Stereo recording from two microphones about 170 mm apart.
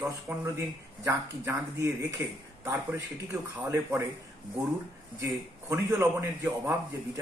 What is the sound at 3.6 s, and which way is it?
Speech, 15° right (ahead or behind).